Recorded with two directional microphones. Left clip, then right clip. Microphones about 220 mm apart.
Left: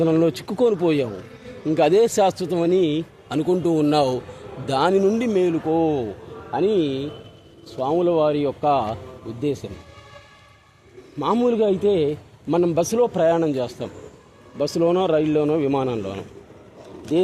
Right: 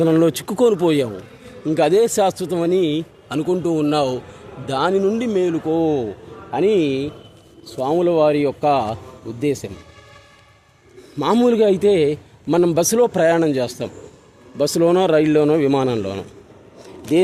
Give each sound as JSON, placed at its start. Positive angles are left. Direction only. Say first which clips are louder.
{"t": 0.0, "sound": "a man's voice", "louder": "right 3 dB", "side_deg": -25}
{"t": 11.2, "sound": "a man's voice", "louder": "right 4 dB", "side_deg": -35}